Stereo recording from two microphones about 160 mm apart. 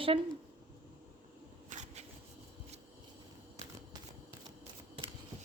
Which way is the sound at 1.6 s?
50° right (ahead or behind).